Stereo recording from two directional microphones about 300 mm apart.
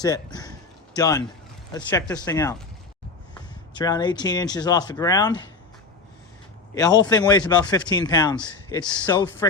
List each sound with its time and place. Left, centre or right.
0.0 s speech: centre
3.8 s speech: centre
6.7 s speech: centre